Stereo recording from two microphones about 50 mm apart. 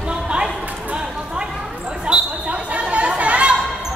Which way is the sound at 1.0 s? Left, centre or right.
Centre.